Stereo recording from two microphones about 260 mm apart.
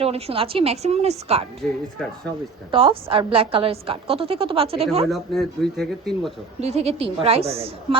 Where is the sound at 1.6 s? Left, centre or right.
Centre.